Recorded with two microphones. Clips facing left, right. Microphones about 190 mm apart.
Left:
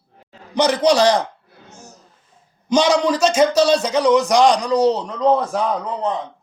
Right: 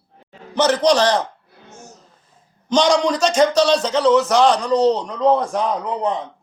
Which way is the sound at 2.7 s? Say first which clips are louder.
Even; 5° left (ahead or behind).